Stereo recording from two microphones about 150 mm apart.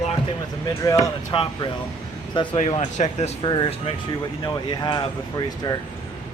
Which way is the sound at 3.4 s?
35° left (ahead or behind).